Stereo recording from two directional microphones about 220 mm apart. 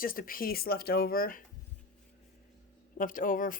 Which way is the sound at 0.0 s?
40° left (ahead or behind).